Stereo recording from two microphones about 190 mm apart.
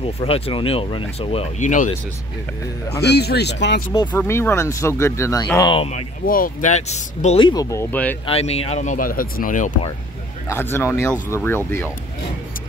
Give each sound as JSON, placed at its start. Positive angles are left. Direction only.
{"t": 0.0, "sound": "speech", "side_deg": 30}
{"t": 3.0, "sound": "speech", "side_deg": 60}
{"t": 4.1, "sound": "speech", "side_deg": 10}
{"t": 5.6, "sound": "speech", "side_deg": 25}
{"t": 6.2, "sound": "speech", "side_deg": 50}
{"t": 8.3, "sound": "speech", "side_deg": 30}
{"t": 10.5, "sound": "speech", "side_deg": 10}